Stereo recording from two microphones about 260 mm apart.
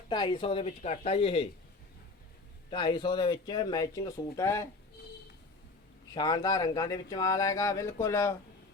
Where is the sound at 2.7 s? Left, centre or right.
Centre.